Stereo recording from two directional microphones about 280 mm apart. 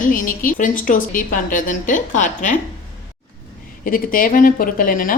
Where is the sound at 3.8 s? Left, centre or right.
Left.